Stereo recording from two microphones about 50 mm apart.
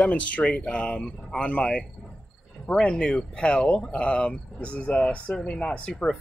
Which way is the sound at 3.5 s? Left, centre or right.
Centre.